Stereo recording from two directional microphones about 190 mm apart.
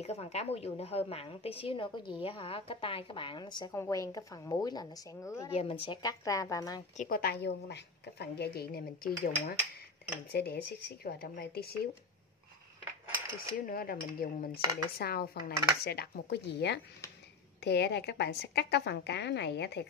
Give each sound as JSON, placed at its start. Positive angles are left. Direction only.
{"t": 0.0, "sound": "a woman's voice", "side_deg": 35}
{"t": 5.5, "sound": "a woman's voice", "side_deg": 30}
{"t": 7.0, "sound": "a woman's voice", "side_deg": 50}
{"t": 13.7, "sound": "cutlery", "side_deg": 50}
{"t": 15.0, "sound": "a woman's voice", "side_deg": 55}